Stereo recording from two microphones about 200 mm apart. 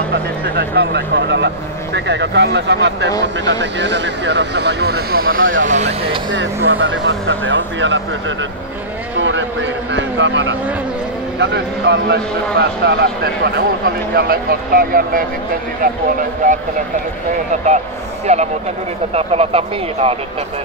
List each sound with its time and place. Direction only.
0.1 s speech: 55° right (ahead or behind); by 6.2 s 30° right (ahead or behind)
6.3 s speech: 65° right (ahead or behind)
9.2 s vehicle: 70° right (ahead or behind)
11.3 s speech: 60° right (ahead or behind); by 16.0 s 45° right (ahead or behind)
18.2 s speech: 35° right (ahead or behind)